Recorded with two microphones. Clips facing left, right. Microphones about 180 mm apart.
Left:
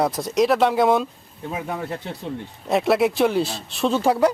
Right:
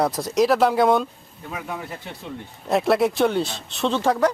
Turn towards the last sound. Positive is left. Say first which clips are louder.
# left 2 dB
turn(degrees=10)  # may be behind; listen again after turning